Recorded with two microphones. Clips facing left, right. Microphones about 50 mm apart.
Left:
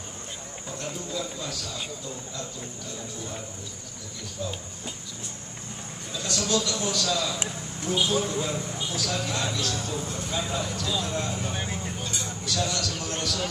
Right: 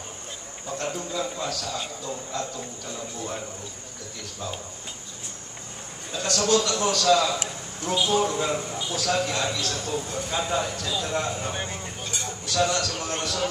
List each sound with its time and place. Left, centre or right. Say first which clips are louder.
0.7 s speech: right 4 dB; right
6.1 s speech: right 5 dB; right
11.5 s speech: even; centre
12.4 s a man's voice: right 5 dB; right